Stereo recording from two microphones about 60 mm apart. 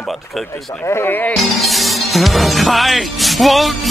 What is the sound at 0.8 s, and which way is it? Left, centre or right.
Speech, left.